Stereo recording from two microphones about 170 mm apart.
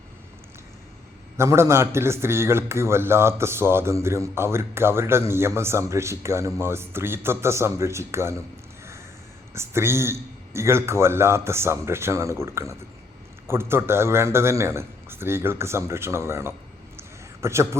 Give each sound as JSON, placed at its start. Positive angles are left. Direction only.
{"t": 1.4, "sound": "a man's voice", "side_deg": -15}
{"t": 9.6, "sound": "a man's voice", "side_deg": -15}
{"t": 17.0, "sound": "a sound", "side_deg": -15}